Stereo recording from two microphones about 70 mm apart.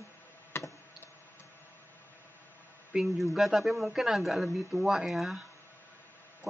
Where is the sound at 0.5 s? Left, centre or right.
Left.